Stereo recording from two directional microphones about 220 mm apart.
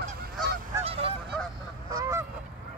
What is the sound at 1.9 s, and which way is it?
Goose, 15° right (ahead or behind).